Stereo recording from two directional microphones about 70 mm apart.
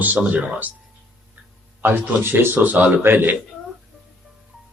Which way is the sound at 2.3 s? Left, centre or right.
Right.